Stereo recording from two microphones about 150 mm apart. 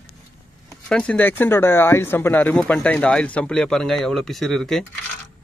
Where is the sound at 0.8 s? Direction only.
5° left (ahead or behind).